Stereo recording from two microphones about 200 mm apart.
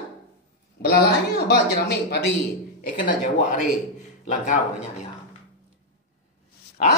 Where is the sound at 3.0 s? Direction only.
40° left (ahead or behind).